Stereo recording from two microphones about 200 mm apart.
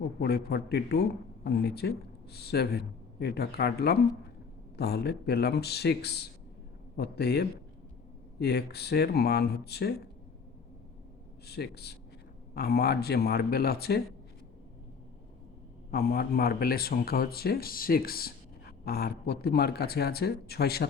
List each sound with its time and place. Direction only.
0.2 s speech: 50° left (ahead or behind)
11.4 s speech: 55° left (ahead or behind)
15.9 s speech: 50° left (ahead or behind)